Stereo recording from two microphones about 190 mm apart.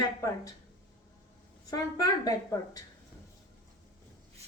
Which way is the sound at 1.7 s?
20° left (ahead or behind).